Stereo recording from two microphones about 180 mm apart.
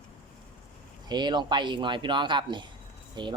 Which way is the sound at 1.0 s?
25° right (ahead or behind).